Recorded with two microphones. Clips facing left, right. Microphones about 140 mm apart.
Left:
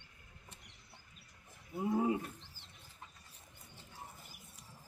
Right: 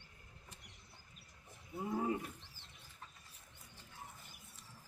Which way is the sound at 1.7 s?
20° left (ahead or behind).